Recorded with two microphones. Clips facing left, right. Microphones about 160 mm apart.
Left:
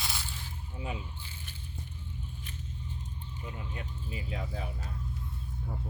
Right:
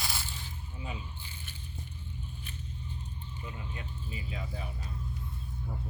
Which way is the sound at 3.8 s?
65° left (ahead or behind).